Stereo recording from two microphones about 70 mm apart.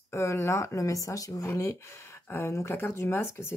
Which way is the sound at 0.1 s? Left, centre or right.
Left.